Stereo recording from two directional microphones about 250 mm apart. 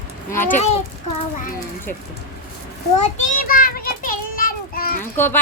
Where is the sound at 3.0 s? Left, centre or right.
Left.